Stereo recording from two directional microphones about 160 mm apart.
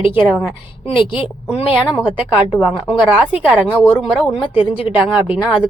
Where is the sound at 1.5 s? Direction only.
35° left (ahead or behind).